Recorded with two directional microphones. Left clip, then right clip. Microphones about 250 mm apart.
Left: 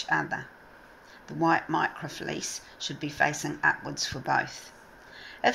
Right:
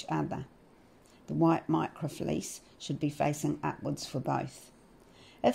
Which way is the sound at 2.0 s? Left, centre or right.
Right.